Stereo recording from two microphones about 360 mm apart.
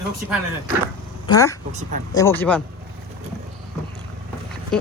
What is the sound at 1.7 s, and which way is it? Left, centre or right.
Speech, centre.